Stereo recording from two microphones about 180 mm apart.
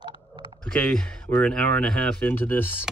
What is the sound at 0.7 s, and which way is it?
Speech, 5° left (ahead or behind).